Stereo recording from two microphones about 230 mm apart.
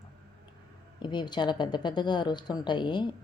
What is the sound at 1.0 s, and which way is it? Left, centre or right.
Speech, centre.